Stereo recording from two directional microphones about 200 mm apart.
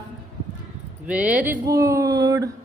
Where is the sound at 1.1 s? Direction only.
5° right (ahead or behind).